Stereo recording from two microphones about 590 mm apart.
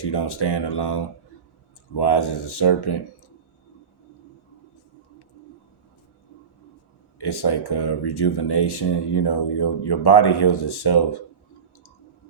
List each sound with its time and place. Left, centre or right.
0.0 s speech: left
7.2 s speech: left